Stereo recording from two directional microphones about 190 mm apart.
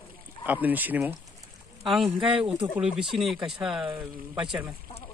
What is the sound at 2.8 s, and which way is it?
Speech, centre (ahead or behind).